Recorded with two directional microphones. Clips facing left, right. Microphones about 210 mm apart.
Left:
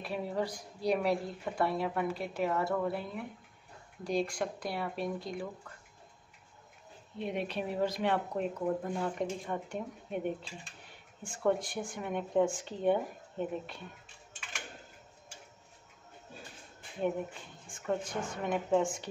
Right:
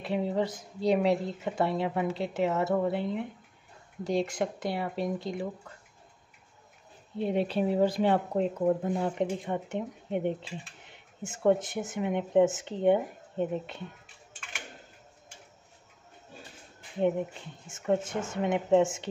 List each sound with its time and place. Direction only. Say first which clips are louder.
0.0 s speech: right 5 dB; 25° right (ahead or behind)
7.2 s speech: right 7 dB; 30° right (ahead or behind)
17.6 s speech: right 6 dB; 25° right (ahead or behind)